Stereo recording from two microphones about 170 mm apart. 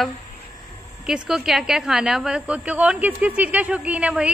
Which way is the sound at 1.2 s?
Centre (ahead or behind).